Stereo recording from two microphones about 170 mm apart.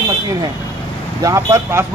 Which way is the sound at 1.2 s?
20° right (ahead or behind).